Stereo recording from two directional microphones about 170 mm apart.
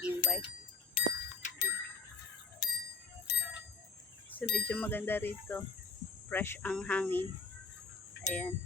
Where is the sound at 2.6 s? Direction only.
70° left (ahead or behind).